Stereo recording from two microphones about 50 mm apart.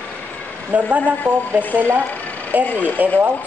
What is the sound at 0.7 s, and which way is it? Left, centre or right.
A woman's voice, right.